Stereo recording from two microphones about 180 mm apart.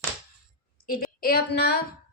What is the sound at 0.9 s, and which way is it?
Speech, 55° left (ahead or behind).